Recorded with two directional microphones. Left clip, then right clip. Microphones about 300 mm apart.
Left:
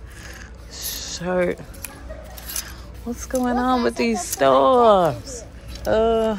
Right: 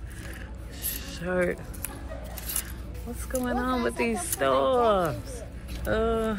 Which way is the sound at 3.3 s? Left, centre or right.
Centre.